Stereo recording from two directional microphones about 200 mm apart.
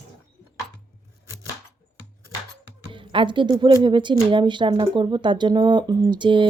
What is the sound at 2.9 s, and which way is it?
A woman's voice, 25° right (ahead or behind).